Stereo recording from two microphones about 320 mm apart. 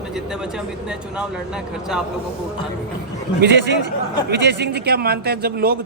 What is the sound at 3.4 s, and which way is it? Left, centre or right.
Speech, right.